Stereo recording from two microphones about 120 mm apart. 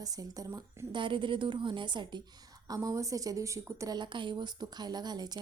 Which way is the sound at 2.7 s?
30° right (ahead or behind).